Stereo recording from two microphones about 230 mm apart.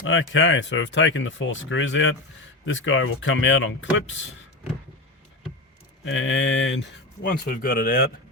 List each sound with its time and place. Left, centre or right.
0.0 s speech: left
6.1 s speech: left